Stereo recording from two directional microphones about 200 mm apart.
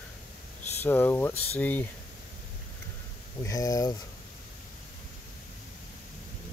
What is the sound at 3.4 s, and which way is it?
Speech, 15° left (ahead or behind).